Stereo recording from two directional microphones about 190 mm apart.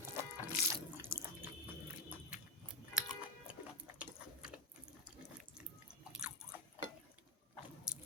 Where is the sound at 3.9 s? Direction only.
5° right (ahead or behind).